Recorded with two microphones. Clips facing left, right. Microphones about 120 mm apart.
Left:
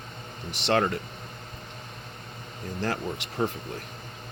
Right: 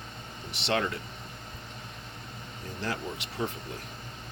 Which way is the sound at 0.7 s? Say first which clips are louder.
Left 5 dB; 50° left (ahead or behind).